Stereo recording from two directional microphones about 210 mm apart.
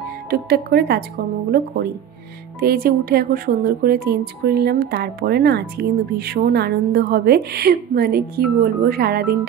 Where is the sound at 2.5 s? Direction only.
45° right (ahead or behind).